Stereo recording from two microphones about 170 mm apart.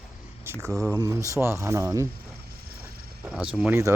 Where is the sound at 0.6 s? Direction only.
15° right (ahead or behind).